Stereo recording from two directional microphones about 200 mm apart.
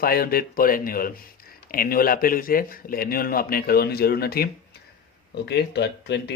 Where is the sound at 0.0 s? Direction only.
50° left (ahead or behind).